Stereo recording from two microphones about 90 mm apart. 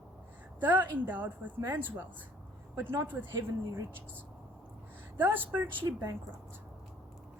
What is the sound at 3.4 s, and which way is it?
Speech, 30° right (ahead or behind).